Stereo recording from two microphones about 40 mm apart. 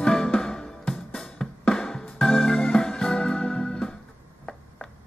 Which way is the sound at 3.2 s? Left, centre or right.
Left.